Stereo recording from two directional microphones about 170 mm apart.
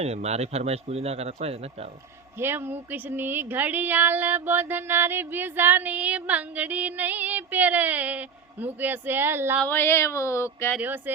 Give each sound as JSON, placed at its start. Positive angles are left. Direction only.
{"t": 0.0, "sound": "speech", "side_deg": -40}
{"t": 2.4, "sound": "speech", "side_deg": -15}
{"t": 9.6, "sound": "speech", "side_deg": 15}
{"t": 10.8, "sound": "speech", "side_deg": -10}